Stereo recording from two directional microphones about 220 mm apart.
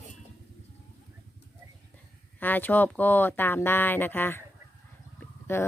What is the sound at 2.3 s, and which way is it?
Speech, 10° left (ahead or behind).